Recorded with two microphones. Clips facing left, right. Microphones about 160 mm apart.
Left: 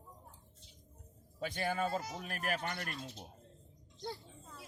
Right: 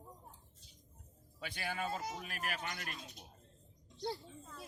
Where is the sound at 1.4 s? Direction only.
45° left (ahead or behind).